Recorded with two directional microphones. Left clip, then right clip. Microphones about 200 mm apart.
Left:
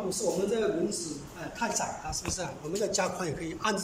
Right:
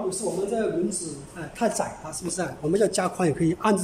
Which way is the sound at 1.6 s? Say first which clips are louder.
Right 6 dB; 45° right (ahead or behind).